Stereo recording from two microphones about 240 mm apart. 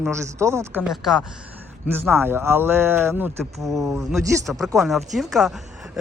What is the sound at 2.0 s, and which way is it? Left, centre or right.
Speech, centre.